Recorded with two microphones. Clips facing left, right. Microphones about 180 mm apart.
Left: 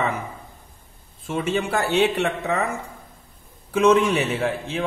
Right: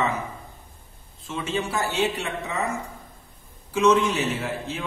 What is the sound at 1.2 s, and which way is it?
A man's voice, 55° left (ahead or behind).